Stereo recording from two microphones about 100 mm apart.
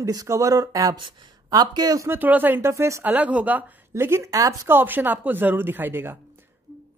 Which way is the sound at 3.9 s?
25° right (ahead or behind).